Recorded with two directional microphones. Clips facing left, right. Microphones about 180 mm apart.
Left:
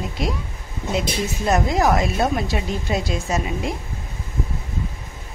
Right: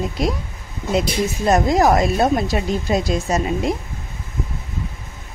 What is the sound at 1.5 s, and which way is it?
A woman's voice, 40° right (ahead or behind).